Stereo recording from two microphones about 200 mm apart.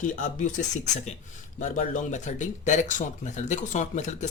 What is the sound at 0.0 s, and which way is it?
Speech, 40° left (ahead or behind).